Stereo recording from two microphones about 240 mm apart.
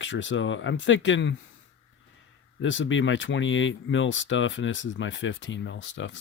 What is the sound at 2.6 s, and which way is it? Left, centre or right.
Speech, left.